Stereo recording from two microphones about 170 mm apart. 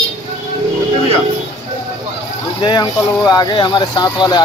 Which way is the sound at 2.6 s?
25° left (ahead or behind).